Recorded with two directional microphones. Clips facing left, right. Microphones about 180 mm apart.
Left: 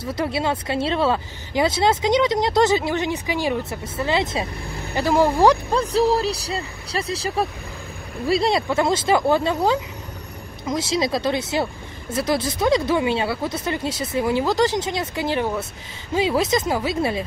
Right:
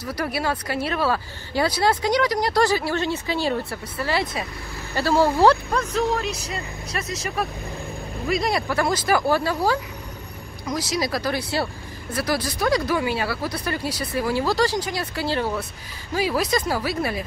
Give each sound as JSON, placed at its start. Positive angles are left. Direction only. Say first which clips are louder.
{"t": 0.0, "sound": "speech", "louder": "left 2 dB", "side_deg": 25}
{"t": 5.7, "sound": "speech", "louder": "left 4 dB", "side_deg": 35}